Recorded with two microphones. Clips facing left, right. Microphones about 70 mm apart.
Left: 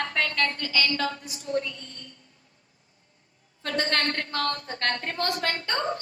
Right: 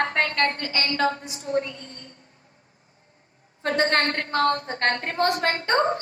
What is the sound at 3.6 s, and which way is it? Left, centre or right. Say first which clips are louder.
A woman's voice: right 5 dB; right.